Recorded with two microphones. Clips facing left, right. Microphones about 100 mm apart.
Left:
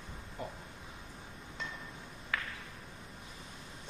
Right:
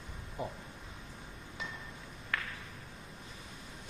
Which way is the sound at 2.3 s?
Centre (ahead or behind).